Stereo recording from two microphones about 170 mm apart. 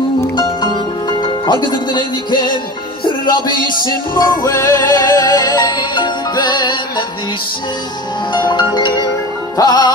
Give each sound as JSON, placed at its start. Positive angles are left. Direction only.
{"t": 0.4, "sound": "music", "side_deg": 25}
{"t": 8.3, "sound": "music", "side_deg": 25}